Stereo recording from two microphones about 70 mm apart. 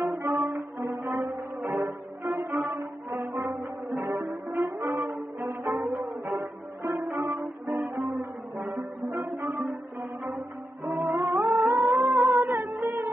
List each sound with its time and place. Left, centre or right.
0.0 s music: right
10.9 s music: right
11.1 s music: right